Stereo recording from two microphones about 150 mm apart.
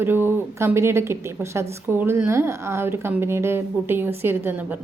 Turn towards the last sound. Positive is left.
turn(degrees=-10)  # may be behind; listen again after turning